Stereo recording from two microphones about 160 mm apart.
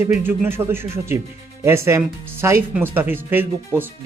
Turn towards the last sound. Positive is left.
turn(degrees=-15)  # may be behind; listen again after turning